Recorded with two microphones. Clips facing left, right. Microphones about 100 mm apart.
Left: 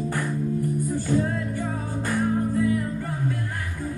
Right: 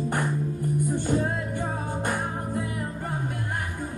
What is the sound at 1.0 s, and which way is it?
Music, 25° right (ahead or behind).